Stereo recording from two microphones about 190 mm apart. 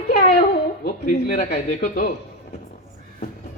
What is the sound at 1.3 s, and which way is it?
Speech, 50° left (ahead or behind).